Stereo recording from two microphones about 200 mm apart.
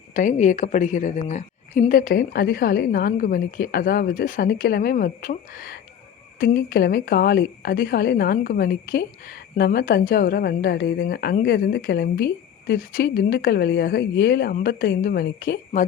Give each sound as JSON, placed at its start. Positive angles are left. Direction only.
{"t": 0.1, "sound": "a woman's voice", "side_deg": 40}